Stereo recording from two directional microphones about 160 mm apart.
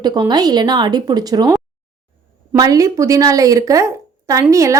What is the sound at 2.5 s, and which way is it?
A woman's voice, 25° right (ahead or behind).